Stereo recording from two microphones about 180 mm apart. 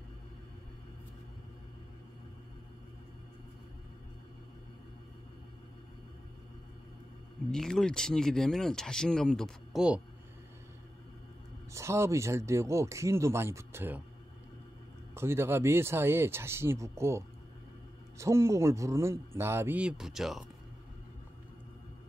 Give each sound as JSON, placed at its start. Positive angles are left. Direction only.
{"t": 7.5, "sound": "speech", "side_deg": 5}
{"t": 11.7, "sound": "speech", "side_deg": -15}
{"t": 15.1, "sound": "speech", "side_deg": -15}